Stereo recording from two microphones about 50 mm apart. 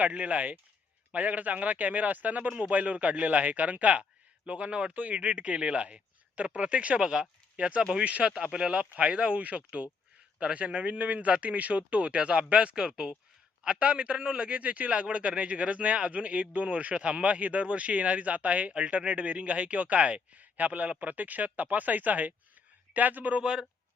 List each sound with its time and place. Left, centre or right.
0.0 s a man's voice: right
23.4 s speech: centre